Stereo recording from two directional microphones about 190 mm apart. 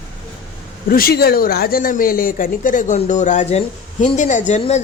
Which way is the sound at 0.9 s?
50° left (ahead or behind).